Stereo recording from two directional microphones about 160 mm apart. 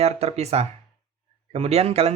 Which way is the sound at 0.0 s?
40° right (ahead or behind).